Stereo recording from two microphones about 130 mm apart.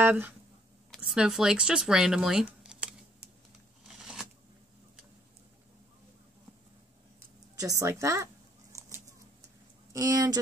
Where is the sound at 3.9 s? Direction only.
5° right (ahead or behind).